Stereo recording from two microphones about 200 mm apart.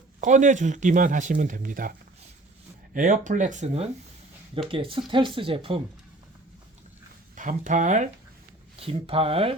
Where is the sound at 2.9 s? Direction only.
40° right (ahead or behind).